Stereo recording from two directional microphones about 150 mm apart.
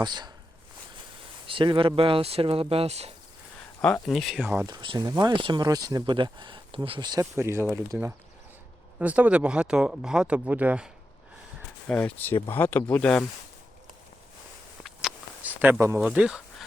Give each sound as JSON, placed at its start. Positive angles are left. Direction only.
{"t": 0.0, "sound": "speech", "side_deg": -30}
{"t": 1.5, "sound": "speech", "side_deg": -35}
{"t": 3.8, "sound": "speech", "side_deg": 10}
{"t": 4.0, "sound": "speech", "side_deg": 0}
{"t": 4.4, "sound": "speech", "side_deg": -15}
{"t": 4.6, "sound": "speech", "side_deg": -30}
{"t": 11.9, "sound": "speech", "side_deg": 10}
{"t": 14.8, "sound": "a sound", "side_deg": -5}
{"t": 16.0, "sound": "speech", "side_deg": -5}